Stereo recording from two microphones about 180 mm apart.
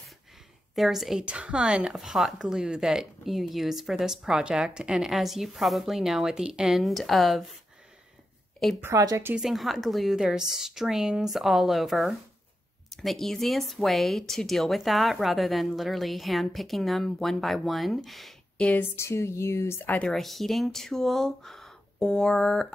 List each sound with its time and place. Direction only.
0.7 s speech: centre (ahead or behind)
8.8 s speech: 15° right (ahead or behind)
9.3 s speech: centre (ahead or behind)